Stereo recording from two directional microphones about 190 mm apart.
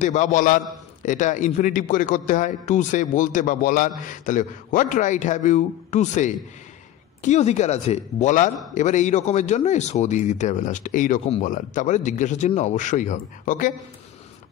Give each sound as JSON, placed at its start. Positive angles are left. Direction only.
{"t": 0.0, "sound": "a man's voice", "side_deg": 40}